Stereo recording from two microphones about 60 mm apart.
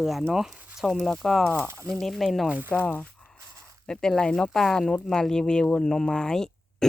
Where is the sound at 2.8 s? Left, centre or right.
Left.